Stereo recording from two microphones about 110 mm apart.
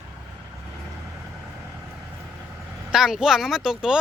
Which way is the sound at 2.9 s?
5° right (ahead or behind).